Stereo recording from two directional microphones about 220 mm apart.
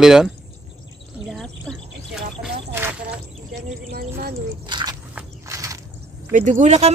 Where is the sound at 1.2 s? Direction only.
Centre (ahead or behind).